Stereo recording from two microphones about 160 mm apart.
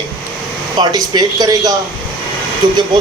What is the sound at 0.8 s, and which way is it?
Speech, 25° right (ahead or behind).